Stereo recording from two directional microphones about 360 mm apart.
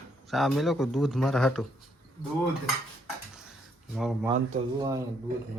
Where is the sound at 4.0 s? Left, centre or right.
Centre.